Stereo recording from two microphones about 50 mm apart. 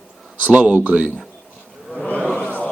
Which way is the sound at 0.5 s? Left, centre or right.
Right.